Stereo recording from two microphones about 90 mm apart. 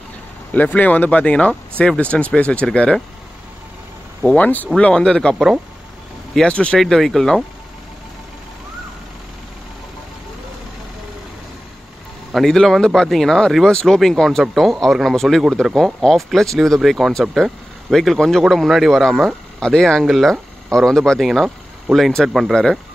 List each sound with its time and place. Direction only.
0.5 s speech: 20° left (ahead or behind)
4.2 s speech: 15° left (ahead or behind)
5.3 s speech: 5° right (ahead or behind)
6.3 s speech: 10° left (ahead or behind)
6.8 s speech: 5° left (ahead or behind)
12.3 s speech: centre (ahead or behind)